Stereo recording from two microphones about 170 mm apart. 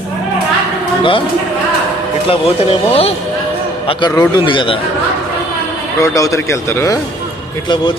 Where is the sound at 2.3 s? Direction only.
35° left (ahead or behind).